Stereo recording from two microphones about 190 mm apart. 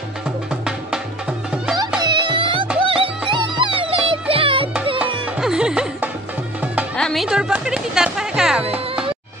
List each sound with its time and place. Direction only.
2.0 s music: 25° right (ahead or behind)
4.9 s music: 5° right (ahead or behind)